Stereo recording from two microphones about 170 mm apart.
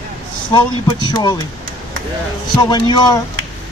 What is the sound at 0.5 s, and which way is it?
Speech, 25° left (ahead or behind).